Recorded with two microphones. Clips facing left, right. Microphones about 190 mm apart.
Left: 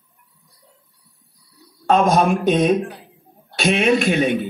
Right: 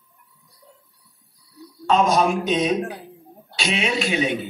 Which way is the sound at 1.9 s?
55° left (ahead or behind).